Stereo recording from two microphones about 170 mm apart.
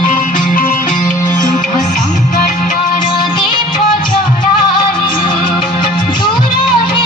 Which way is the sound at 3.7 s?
55° left (ahead or behind).